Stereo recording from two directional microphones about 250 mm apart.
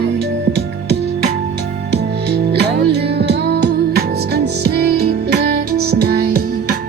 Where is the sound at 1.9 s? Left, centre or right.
Right.